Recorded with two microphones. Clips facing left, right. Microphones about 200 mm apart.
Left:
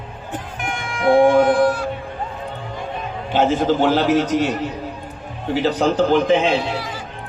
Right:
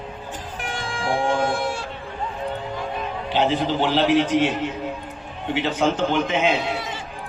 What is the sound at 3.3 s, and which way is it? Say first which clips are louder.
A man's voice: left 5 dB; 45° left (ahead or behind).